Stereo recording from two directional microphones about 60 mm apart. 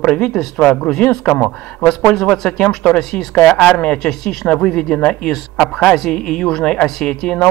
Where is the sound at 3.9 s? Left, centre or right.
Centre.